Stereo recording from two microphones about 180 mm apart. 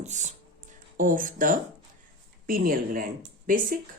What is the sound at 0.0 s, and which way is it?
Speech, 40° right (ahead or behind).